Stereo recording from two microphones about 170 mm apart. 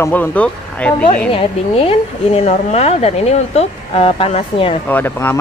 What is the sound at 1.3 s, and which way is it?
Speech, 35° left (ahead or behind).